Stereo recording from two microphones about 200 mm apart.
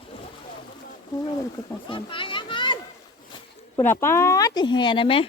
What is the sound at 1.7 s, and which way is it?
Children playing, 25° left (ahead or behind).